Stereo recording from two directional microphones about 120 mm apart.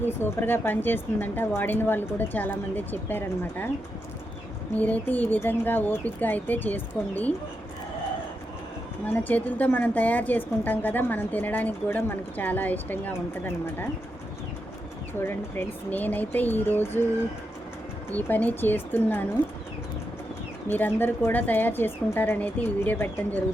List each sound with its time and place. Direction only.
0.0 s a woman's voice: 20° left (ahead or behind)
4.8 s a woman's voice: 15° left (ahead or behind)
9.0 s a woman's voice: 15° left (ahead or behind)
15.2 s a woman's voice: 15° left (ahead or behind)
18.1 s a woman's voice: 15° left (ahead or behind)
20.7 s a woman's voice: 15° left (ahead or behind)